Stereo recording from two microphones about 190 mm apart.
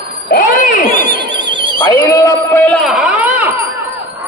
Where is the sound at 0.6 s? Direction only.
40° left (ahead or behind).